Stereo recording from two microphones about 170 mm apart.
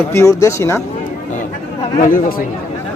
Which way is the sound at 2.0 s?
55° left (ahead or behind).